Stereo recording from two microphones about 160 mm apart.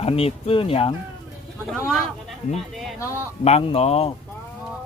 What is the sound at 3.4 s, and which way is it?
Speech, 40° left (ahead or behind).